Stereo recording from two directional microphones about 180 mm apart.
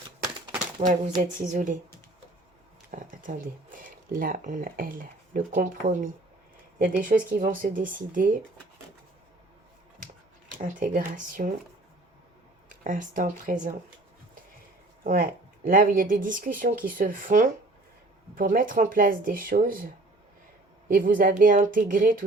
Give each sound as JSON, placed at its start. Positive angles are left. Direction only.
{"t": 0.8, "sound": "speech", "side_deg": -45}
{"t": 2.9, "sound": "speech", "side_deg": -50}
{"t": 10.5, "sound": "speech", "side_deg": -45}
{"t": 12.6, "sound": "speech", "side_deg": -45}
{"t": 15.0, "sound": "speech", "side_deg": -50}